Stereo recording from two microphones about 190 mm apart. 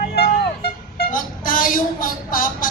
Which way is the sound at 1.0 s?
45° left (ahead or behind).